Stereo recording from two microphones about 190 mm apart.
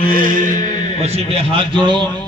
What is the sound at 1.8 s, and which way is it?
Speech, 25° right (ahead or behind).